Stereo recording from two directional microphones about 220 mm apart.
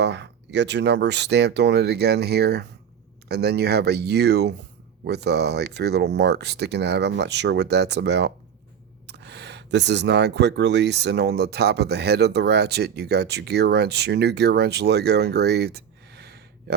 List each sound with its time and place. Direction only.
0.0 s speech: 50° right (ahead or behind)